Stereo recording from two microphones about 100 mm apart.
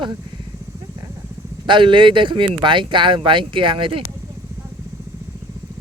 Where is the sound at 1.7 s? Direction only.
55° right (ahead or behind).